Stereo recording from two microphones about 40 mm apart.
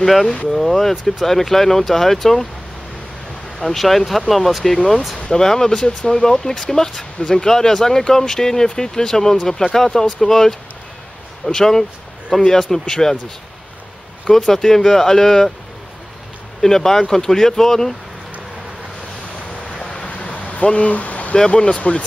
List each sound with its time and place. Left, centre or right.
0.0 s speech: centre
3.6 s speech: centre
4.7 s speech: centre
14.3 s speech: centre
16.6 s speech: centre
19.8 s vehicle: left
20.1 s vehicle: left
20.6 s speech: left